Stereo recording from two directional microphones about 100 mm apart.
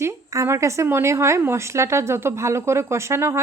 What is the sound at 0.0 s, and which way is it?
Speech, 30° right (ahead or behind).